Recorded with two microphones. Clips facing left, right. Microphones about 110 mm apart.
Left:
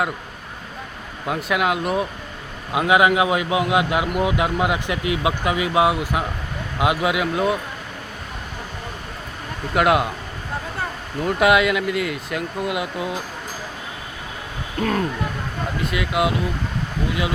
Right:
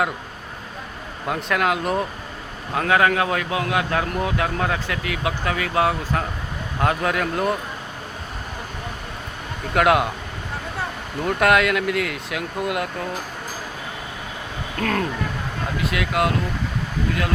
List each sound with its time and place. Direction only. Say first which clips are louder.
1.3 s speech: left 1 dB; 5° left (ahead or behind)
2.7 s speech: left 2 dB; 15° left (ahead or behind)
9.7 s speech: even; centre (ahead or behind)
11.2 s speech: left 1 dB; centre (ahead or behind)
14.8 s speech: left 1 dB; 5° left (ahead or behind)